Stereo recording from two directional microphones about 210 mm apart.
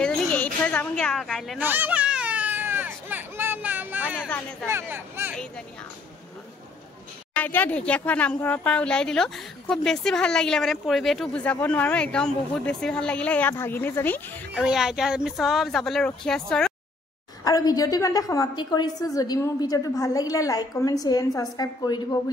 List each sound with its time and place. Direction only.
0.0 s a sound: 5° left (ahead or behind)
1.6 s a sound: 10° right (ahead or behind)
4.6 s speech: 10° right (ahead or behind)
7.3 s a woman's voice: 10° left (ahead or behind)
14.5 s speech: 5° right (ahead or behind)
17.5 s a woman's voice: 15° left (ahead or behind)